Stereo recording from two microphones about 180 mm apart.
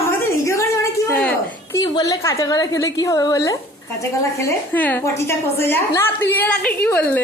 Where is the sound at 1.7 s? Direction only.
20° left (ahead or behind).